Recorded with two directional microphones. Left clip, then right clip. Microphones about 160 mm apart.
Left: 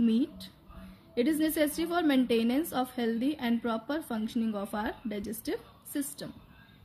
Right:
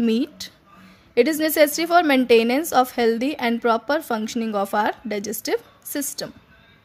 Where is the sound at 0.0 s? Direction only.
55° right (ahead or behind).